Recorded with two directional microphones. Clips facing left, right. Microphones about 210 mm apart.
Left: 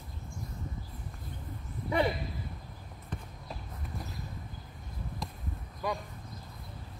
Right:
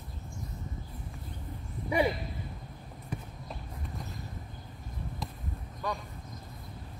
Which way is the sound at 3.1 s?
10° right (ahead or behind).